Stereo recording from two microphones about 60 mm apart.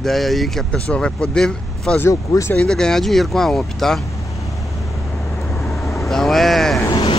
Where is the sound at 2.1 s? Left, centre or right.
Left.